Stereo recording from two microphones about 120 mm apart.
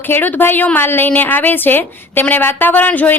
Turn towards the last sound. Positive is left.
turn(degrees=15)  # may be behind; listen again after turning